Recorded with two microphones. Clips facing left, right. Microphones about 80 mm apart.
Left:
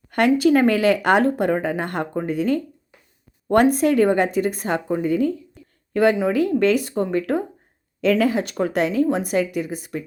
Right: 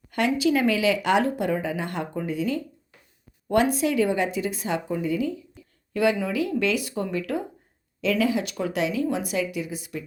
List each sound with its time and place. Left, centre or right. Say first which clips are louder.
0.1 s a woman's voice: left 6 dB; left